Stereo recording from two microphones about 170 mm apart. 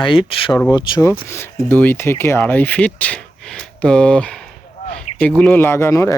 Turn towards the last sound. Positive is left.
turn(degrees=15)  # may be behind; listen again after turning